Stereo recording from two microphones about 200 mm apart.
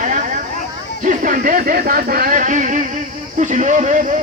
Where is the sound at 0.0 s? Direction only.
40° right (ahead or behind).